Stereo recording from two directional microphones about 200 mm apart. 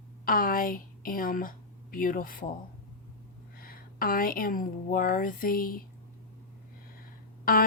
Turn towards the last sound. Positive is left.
turn(degrees=45)  # may be behind; listen again after turning